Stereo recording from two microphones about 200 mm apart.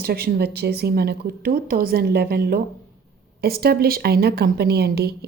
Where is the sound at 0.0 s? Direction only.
50° right (ahead or behind).